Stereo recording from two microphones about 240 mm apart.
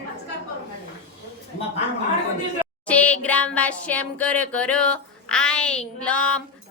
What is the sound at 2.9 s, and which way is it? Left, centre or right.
Music, centre.